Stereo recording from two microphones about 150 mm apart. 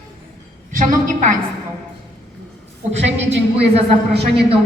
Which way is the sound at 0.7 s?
60° right (ahead or behind).